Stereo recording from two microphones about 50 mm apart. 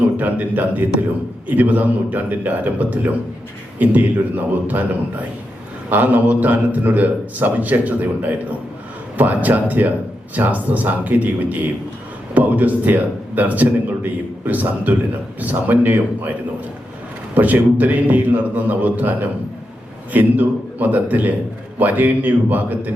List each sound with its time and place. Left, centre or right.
0.2 s a man's voice: right
5.9 s a man's voice: right
17.3 s a man's voice: right